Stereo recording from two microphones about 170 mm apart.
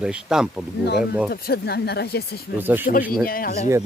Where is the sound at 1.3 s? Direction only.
70° left (ahead or behind).